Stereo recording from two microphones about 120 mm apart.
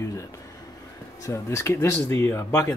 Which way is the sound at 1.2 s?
25° left (ahead or behind).